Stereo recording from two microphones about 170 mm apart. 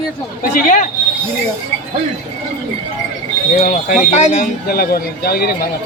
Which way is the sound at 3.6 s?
55° left (ahead or behind).